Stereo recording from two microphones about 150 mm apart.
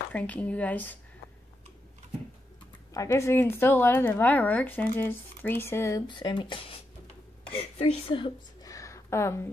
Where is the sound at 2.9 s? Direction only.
20° left (ahead or behind).